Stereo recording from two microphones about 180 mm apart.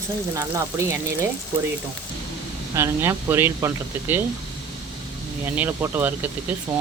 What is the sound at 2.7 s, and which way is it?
Speech, 15° right (ahead or behind).